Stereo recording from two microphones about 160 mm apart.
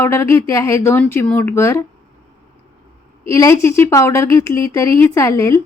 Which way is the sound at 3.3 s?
15° left (ahead or behind).